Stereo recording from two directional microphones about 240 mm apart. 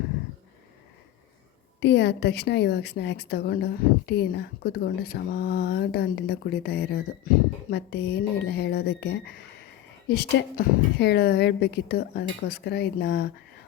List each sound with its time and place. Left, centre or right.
1.8 s a woman's voice: left